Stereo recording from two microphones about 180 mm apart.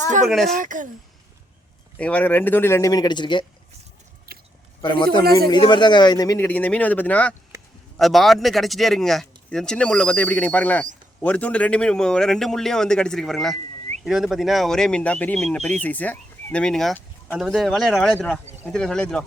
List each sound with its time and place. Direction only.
0.3 s speech: centre (ahead or behind)
0.5 s speech: 45° right (ahead or behind)
2.0 s speech: 5° left (ahead or behind); by 3.4 s 25° left (ahead or behind)
4.3 s biting: 55° right (ahead or behind)
4.8 s a man's voice: 25° left (ahead or behind)
5.2 s speech: 60° right (ahead or behind)
5.5 s speech: 25° left (ahead or behind); by 19.2 s 5° left (ahead or behind)